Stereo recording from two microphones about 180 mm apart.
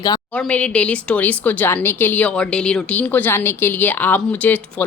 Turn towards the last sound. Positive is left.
turn(degrees=10)  # may be behind; listen again after turning